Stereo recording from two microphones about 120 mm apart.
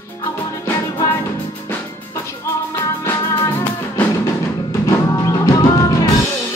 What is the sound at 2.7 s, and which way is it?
Music, 20° left (ahead or behind).